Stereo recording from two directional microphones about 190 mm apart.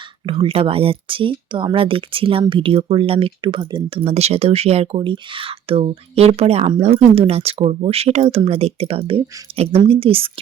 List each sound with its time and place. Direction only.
0.3 s speech: 30° right (ahead or behind)